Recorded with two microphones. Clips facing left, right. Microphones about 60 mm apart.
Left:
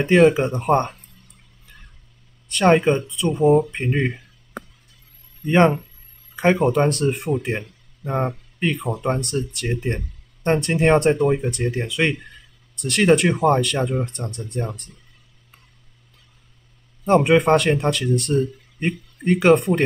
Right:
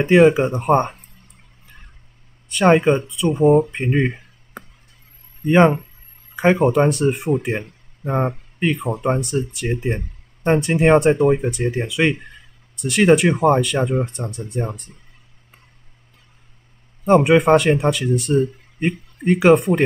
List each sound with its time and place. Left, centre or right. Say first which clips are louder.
0.0 s speech: right 2 dB; centre
2.5 s speech: right 2 dB; centre
5.4 s speech: right 2 dB; centre
8.0 s speech: right 3 dB; right
8.5 s speech: right 2 dB; centre
17.0 s speech: right 2 dB; centre